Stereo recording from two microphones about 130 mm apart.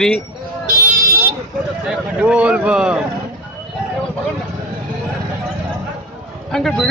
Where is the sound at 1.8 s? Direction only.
10° right (ahead or behind).